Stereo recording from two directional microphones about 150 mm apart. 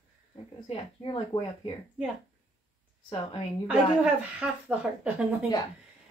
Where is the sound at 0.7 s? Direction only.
35° left (ahead or behind).